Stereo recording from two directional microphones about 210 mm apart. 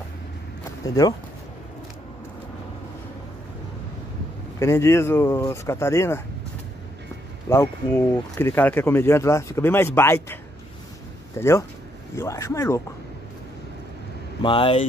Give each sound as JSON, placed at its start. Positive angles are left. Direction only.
{"t": 0.8, "sound": "speech", "side_deg": 15}
{"t": 4.6, "sound": "speech", "side_deg": 15}
{"t": 7.4, "sound": "speech", "side_deg": 10}
{"t": 14.4, "sound": "speech", "side_deg": 25}